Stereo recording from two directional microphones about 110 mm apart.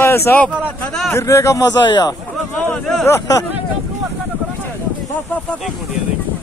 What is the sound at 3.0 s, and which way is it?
Speech, 30° left (ahead or behind).